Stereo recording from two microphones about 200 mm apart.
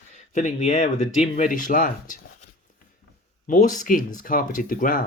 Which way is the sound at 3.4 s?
40° left (ahead or behind).